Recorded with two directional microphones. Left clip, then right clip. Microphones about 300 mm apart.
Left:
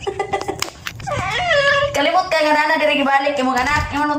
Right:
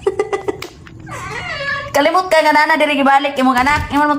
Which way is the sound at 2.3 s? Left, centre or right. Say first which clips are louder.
Right 4 dB; centre.